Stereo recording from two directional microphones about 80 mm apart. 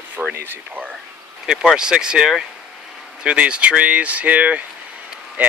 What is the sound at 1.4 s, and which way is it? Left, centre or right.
Speech, centre.